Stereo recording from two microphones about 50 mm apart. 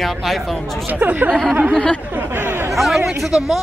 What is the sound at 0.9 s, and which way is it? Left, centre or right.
Speech, right.